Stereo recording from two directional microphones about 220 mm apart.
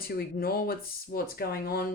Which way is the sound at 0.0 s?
45° left (ahead or behind).